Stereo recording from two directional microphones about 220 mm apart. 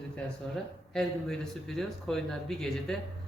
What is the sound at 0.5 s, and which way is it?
Speech, centre (ahead or behind).